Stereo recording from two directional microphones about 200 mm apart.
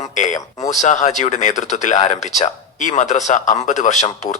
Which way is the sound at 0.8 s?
35° left (ahead or behind).